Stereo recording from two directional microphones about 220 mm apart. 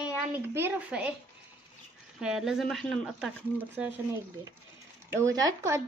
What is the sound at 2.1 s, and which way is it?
Speech, centre (ahead or behind).